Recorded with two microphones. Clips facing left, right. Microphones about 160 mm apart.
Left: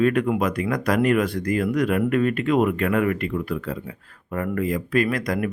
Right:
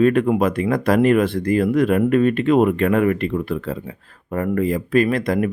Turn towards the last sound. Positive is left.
turn(degrees=-25)  # may be behind; listen again after turning